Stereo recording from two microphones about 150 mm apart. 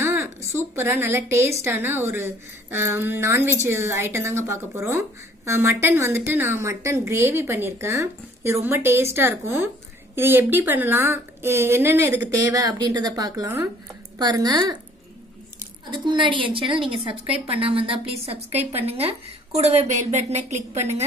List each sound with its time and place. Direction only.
0.0 s a woman's voice: 15° right (ahead or behind)
15.9 s a woman's voice: 30° right (ahead or behind); by 21.0 s 45° right (ahead or behind)